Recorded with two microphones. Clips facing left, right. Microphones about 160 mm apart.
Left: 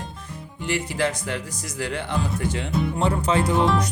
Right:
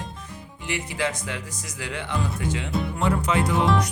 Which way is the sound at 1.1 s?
35° left (ahead or behind).